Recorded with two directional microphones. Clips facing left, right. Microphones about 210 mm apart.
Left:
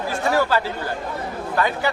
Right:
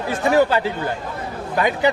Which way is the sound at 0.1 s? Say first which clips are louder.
Right 4 dB; 20° right (ahead or behind).